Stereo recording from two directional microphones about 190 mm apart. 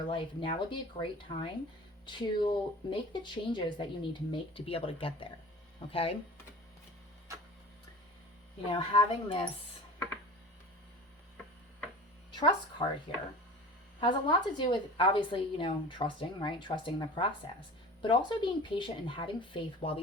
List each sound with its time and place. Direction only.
0.1 s a woman's voice: 25° left (ahead or behind)
8.7 s a woman's voice: 30° left (ahead or behind)
12.3 s speech: 25° left (ahead or behind)
14.0 s a woman's voice: 25° left (ahead or behind)